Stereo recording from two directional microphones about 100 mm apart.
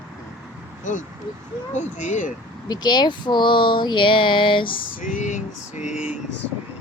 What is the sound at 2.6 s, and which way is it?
Speech, 45° left (ahead or behind).